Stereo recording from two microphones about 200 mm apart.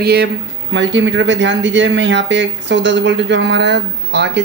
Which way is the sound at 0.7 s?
65° right (ahead or behind).